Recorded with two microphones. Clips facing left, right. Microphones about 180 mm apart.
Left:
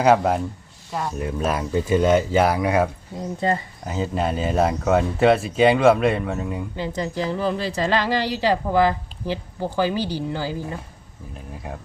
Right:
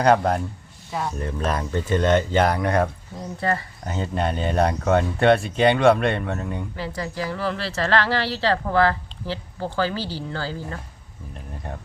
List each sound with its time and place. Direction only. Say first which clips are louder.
0.0 s a woman's voice: left 1 dB; 5° left (ahead or behind)
3.4 s speech: left 2 dB; 20° left (ahead or behind)
3.8 s speech: left 1 dB; 5° left (ahead or behind)
6.7 s a woman's voice: left 5 dB; 20° left (ahead or behind)